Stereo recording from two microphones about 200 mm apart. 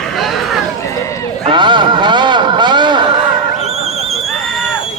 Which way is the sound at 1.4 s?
25° right (ahead or behind).